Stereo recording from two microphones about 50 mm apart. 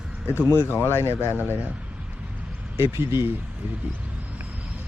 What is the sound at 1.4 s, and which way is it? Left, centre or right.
Speech, right.